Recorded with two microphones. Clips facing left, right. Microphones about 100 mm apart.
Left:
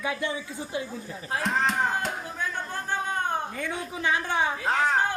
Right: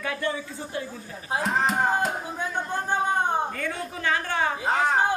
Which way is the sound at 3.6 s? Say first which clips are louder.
Even; 15° left (ahead or behind).